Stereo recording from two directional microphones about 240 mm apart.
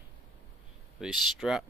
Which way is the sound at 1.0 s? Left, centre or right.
Centre.